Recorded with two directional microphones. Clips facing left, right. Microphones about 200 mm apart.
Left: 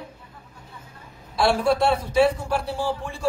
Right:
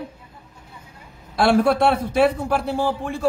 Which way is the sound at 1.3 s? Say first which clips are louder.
Right 3 dB; 55° right (ahead or behind).